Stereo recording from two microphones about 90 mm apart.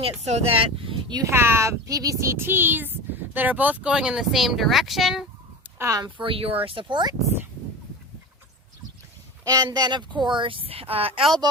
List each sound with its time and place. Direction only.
0.0 s speech: 90° right
1.2 s speech: 30° right (ahead or behind); by 5.2 s centre (ahead or behind)
6.0 s speech: 70° right (ahead or behind)
9.4 s speech: 45° right (ahead or behind); by 11.3 s 90° right